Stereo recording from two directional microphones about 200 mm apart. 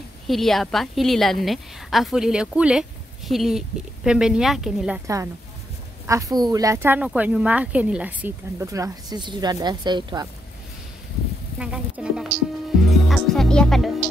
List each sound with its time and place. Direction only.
0.3 s a woman's voice: centre (ahead or behind)
5.0 s speech: 15° right (ahead or behind)
11.5 s a woman's voice: 5° right (ahead or behind)